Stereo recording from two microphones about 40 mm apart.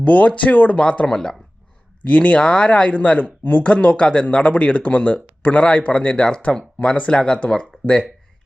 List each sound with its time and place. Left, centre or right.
0.0 s speech: left; by 1.4 s centre
2.0 s speech: left
6.8 s speech: left
7.1 s speech: centre
7.3 s speech: left